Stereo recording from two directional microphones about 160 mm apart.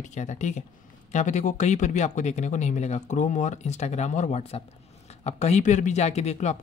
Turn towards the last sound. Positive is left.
turn(degrees=45)  # may be behind; listen again after turning